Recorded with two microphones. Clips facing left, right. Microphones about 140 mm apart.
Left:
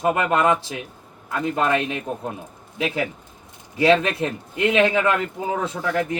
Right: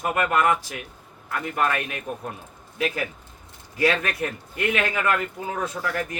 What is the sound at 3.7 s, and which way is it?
A man's voice, 25° left (ahead or behind).